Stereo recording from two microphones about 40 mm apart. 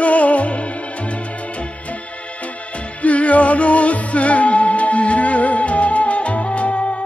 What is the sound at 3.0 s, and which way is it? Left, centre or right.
Music, left.